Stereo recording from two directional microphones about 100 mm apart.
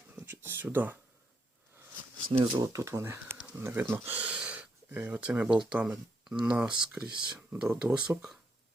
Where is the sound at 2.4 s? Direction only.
50° right (ahead or behind).